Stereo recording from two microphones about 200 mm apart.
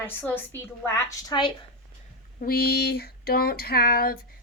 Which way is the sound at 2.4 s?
50° left (ahead or behind).